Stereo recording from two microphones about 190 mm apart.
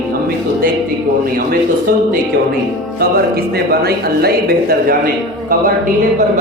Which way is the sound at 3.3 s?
55° right (ahead or behind).